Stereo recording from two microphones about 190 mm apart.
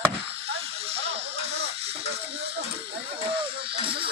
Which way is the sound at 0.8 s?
30° right (ahead or behind).